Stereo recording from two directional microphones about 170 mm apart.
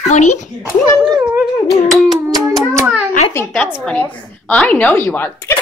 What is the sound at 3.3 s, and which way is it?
A woman's voice, 15° left (ahead or behind).